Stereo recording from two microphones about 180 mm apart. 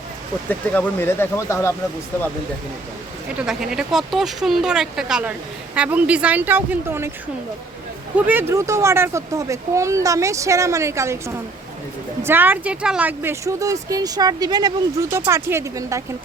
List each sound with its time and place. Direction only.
0.4 s speech: 10° left (ahead or behind)
3.4 s speech: 5° right (ahead or behind)
8.1 s speech: 10° right (ahead or behind)
12.2 s speech: 10° right (ahead or behind)